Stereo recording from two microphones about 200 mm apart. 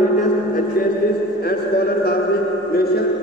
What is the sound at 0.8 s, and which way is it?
Speech, 45° left (ahead or behind).